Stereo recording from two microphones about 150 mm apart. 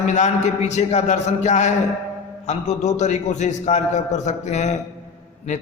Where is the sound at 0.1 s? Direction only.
55° left (ahead or behind).